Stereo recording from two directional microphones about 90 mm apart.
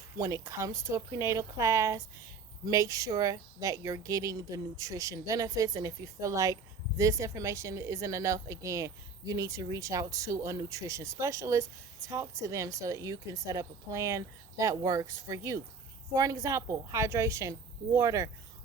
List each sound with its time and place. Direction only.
0.2 s speech: 40° right (ahead or behind)